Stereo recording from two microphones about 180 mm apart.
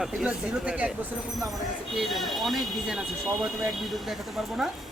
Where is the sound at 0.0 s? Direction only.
5° right (ahead or behind).